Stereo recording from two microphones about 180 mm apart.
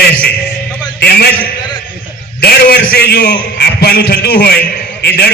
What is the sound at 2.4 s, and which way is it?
A man's voice, 60° left (ahead or behind).